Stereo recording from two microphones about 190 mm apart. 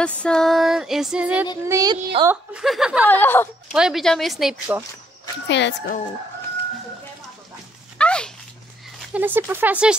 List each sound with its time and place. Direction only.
0.2 s female singing: 5° left (ahead or behind)
1.6 s speech: 15° right (ahead or behind)
2.5 s female singing: centre (ahead or behind)
3.1 s speech: 10° left (ahead or behind)
3.7 s female singing: centre (ahead or behind)
5.5 s speech: 70° left (ahead or behind)
8.0 s a sound: 5° left (ahead or behind)
9.1 s speech: 10° right (ahead or behind)